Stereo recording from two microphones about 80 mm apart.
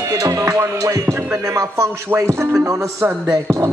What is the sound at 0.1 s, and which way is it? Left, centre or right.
Music, right.